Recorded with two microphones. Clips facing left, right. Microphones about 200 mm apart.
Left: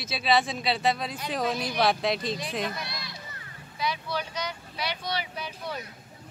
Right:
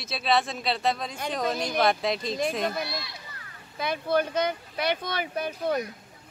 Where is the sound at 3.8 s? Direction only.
50° right (ahead or behind).